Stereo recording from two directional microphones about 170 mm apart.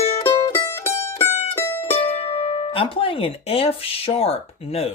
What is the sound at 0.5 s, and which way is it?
Mandolin, 15° left (ahead or behind).